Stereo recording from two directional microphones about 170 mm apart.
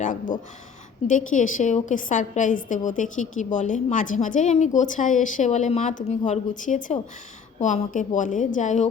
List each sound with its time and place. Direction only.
0.0 s a woman's voice: 50° left (ahead or behind)